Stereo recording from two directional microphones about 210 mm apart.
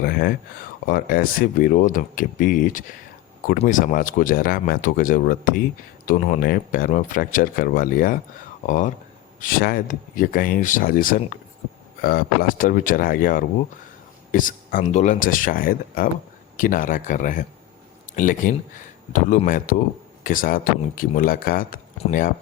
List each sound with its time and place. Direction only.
0.0 s speech: 45° left (ahead or behind)